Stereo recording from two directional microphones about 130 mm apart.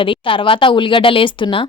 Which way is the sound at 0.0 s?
40° left (ahead or behind).